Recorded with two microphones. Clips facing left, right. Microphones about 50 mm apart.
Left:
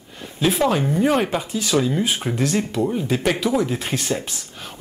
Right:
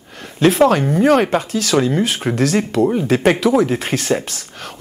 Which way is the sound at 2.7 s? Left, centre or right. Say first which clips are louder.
Right 6 dB; right.